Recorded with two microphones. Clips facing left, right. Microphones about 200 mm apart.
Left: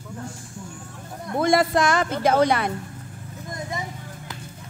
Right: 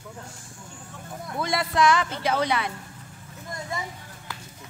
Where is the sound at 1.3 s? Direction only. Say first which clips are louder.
Left 8 dB; 50° left (ahead or behind).